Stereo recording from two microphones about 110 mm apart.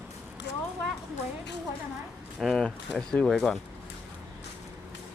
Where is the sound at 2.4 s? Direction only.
Centre (ahead or behind).